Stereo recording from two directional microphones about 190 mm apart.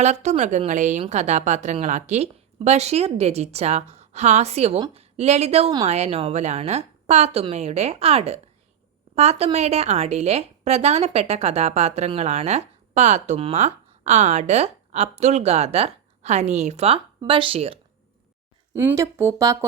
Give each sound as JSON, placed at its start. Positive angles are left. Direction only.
{"t": 0.0, "sound": "a woman's voice", "side_deg": -35}
{"t": 18.7, "sound": "speech", "side_deg": -15}